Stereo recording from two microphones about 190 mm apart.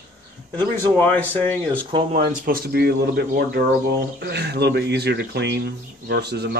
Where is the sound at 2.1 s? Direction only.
50° right (ahead or behind).